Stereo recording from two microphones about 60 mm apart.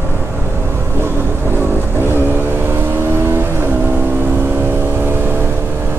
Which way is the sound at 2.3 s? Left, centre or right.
Right.